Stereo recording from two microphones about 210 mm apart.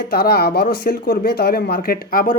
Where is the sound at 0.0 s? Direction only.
45° left (ahead or behind).